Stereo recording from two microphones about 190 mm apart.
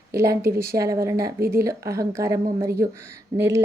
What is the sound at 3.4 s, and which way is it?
Speech, 15° right (ahead or behind).